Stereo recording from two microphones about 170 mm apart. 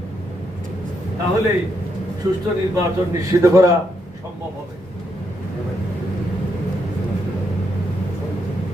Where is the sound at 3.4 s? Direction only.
20° right (ahead or behind).